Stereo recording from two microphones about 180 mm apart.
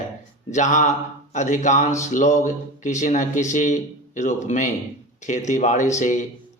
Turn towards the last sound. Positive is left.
turn(degrees=45)  # may be behind; listen again after turning